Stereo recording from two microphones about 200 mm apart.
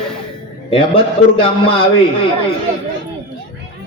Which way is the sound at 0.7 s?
25° left (ahead or behind).